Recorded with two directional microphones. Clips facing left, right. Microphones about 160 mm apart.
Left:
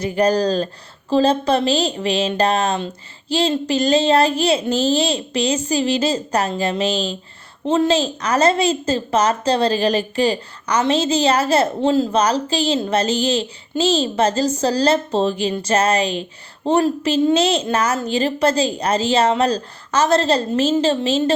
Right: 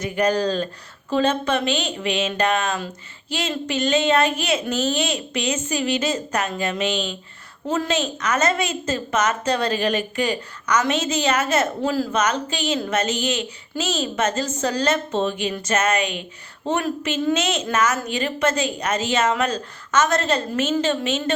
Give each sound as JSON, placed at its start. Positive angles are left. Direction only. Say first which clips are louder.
{"t": 0.0, "sound": "a woman's voice", "louder": "left 4 dB", "side_deg": 35}